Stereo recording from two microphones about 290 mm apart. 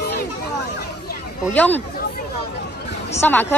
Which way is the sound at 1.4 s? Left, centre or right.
Centre.